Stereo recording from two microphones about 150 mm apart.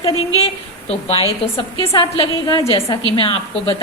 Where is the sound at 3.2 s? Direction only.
35° left (ahead or behind).